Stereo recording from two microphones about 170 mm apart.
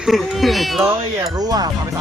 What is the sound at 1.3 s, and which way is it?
Speech, 20° right (ahead or behind).